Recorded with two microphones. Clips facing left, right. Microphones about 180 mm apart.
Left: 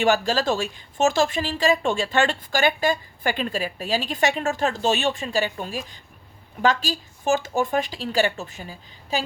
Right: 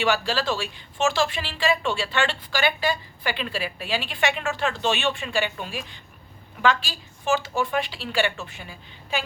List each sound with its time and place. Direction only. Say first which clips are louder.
0.0 s speech: left 3 dB; 45° left (ahead or behind)